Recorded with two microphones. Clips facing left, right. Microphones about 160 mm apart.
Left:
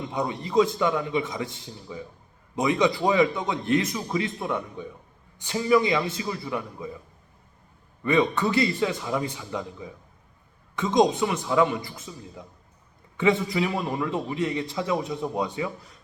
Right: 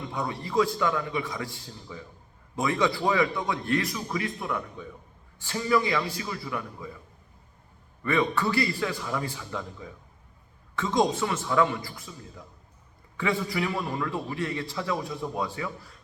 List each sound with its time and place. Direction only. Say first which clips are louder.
0.1 s a man's voice: left 4 dB; 20° left (ahead or behind)
8.0 s a man's voice: left 3 dB; 20° left (ahead or behind)
13.1 s a man's voice: left 5 dB; 20° left (ahead or behind)